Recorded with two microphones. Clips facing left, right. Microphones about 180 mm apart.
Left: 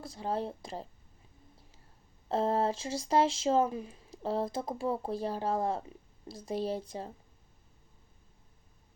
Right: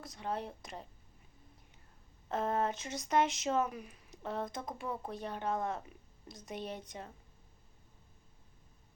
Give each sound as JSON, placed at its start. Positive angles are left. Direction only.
{"t": 0.0, "sound": "speech", "side_deg": 30}
{"t": 2.3, "sound": "speech", "side_deg": 30}